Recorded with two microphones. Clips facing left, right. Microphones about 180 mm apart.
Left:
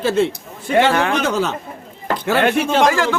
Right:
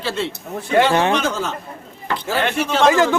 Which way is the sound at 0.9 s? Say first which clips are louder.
Right 1 dB; 25° right (ahead or behind).